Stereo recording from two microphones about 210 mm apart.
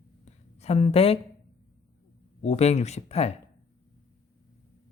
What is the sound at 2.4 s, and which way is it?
Speech, 30° left (ahead or behind).